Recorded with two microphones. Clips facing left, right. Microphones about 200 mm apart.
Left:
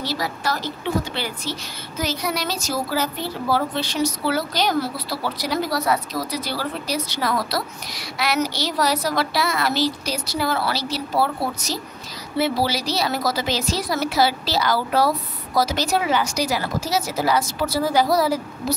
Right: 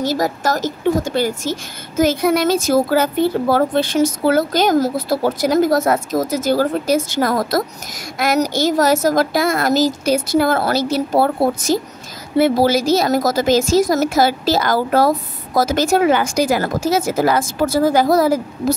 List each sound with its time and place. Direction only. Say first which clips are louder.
0.0 s a woman's voice: right 8 dB; 45° right (ahead or behind)